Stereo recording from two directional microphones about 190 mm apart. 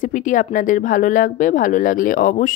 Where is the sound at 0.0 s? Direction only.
45° left (ahead or behind).